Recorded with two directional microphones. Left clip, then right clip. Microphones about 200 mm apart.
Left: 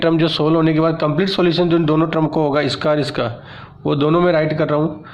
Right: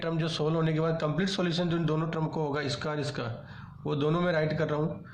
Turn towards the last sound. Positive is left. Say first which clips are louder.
# left 13 dB
turn(degrees=40)  # may be behind; listen again after turning